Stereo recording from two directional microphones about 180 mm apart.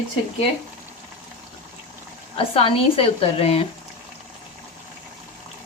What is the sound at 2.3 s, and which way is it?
Speech, 30° left (ahead or behind).